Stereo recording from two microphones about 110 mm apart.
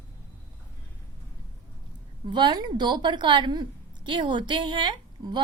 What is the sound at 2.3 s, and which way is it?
A woman's voice, 45° right (ahead or behind).